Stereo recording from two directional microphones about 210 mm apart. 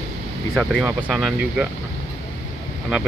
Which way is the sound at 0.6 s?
5° right (ahead or behind).